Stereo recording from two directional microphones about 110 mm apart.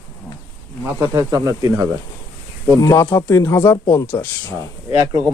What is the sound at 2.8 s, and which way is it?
Speech, 30° left (ahead or behind).